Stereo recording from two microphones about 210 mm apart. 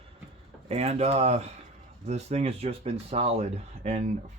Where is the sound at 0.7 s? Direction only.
30° right (ahead or behind).